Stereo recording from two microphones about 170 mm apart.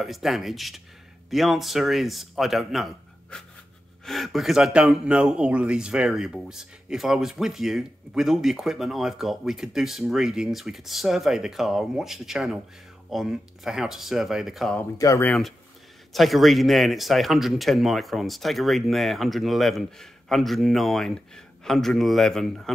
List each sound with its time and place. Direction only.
0.0 s speech: centre (ahead or behind)
14.8 s speech: 15° left (ahead or behind)
16.1 s speech: centre (ahead or behind)